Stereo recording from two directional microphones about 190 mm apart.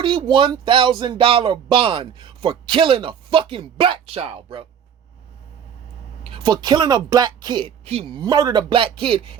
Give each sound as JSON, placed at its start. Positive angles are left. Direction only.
{"t": 0.0, "sound": "speech", "side_deg": -25}
{"t": 6.3, "sound": "speech", "side_deg": -25}